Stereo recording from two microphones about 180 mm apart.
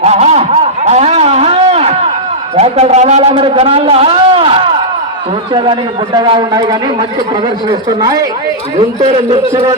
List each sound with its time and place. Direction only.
0.0 s a sound: 35° right (ahead or behind)
2.6 s a man's voice: 35° right (ahead or behind)
6.1 s a man's voice: 25° right (ahead or behind)